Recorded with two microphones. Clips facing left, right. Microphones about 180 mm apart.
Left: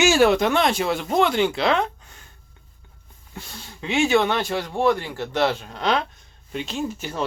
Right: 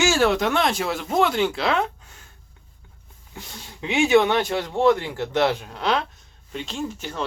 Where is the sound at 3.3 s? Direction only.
15° right (ahead or behind).